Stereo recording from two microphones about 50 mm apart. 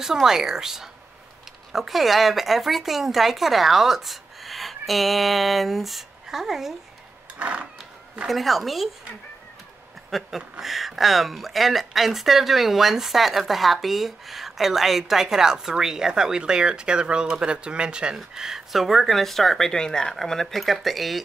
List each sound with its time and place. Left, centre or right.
0.0 s speech: centre
7.3 s a sound: right
8.3 s speech: centre
10.1 s speech: centre